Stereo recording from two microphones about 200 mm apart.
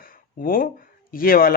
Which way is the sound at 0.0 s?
45° left (ahead or behind).